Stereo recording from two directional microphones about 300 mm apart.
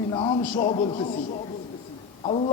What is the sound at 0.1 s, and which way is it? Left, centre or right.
Speech, centre.